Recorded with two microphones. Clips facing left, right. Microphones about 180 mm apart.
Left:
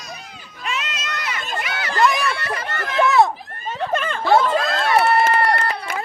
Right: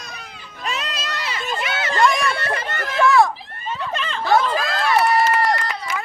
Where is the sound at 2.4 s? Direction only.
25° right (ahead or behind).